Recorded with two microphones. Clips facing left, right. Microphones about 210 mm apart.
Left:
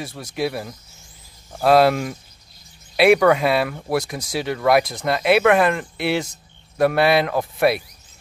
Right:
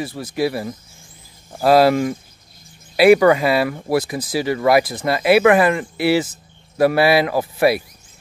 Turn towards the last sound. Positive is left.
turn(degrees=0)  # may be behind; listen again after turning